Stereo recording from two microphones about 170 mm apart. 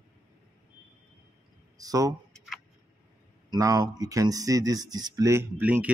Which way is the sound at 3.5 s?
20° right (ahead or behind).